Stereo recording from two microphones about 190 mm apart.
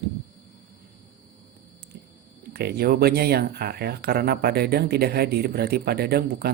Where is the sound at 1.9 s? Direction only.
60° right (ahead or behind).